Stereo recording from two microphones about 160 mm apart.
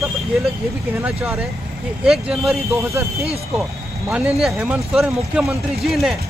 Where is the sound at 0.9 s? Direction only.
10° right (ahead or behind).